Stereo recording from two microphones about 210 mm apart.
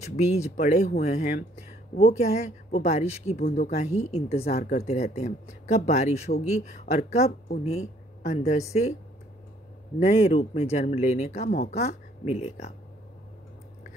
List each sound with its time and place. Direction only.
0.0 s speech: 35° left (ahead or behind)
4.6 s speech: 45° left (ahead or behind)
4.8 s speech: 30° left (ahead or behind)
9.9 s speech: 30° left (ahead or behind)